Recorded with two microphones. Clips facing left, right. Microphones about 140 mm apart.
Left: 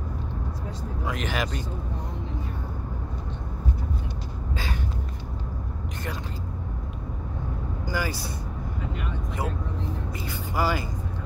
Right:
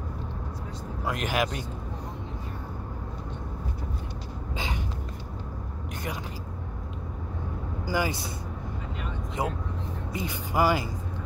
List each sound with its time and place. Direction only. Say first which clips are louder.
1.0 s speech: right 2 dB; 5° right (ahead or behind)
4.6 s a sound: even; 20° right (ahead or behind)
7.8 s speech: right 2 dB; 20° right (ahead or behind)
9.4 s speech: right 1 dB; 20° right (ahead or behind)